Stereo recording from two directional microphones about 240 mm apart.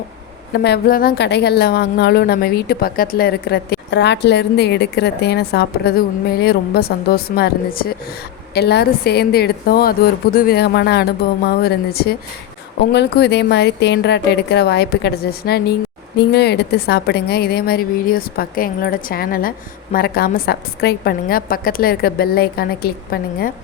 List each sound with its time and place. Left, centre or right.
0.5 s a woman's voice: left